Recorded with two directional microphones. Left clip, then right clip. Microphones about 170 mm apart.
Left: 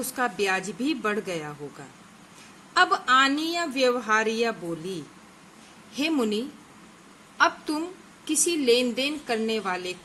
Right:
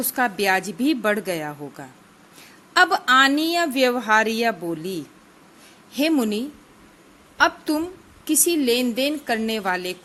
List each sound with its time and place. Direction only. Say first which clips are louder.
0.1 s a woman's voice: right 5 dB; 45° right (ahead or behind)
2.7 s a woman's voice: right 4 dB; 45° right (ahead or behind)